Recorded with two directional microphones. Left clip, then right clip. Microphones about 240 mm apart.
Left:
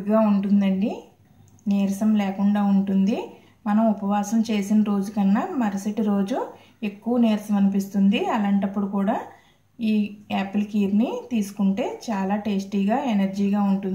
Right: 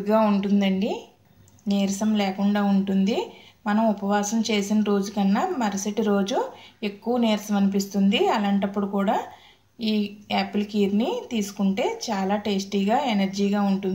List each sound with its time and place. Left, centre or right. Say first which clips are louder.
0.0 s speech: even; centre
9.8 s speech: left 1 dB; right
10.2 s speech: right 2 dB; centre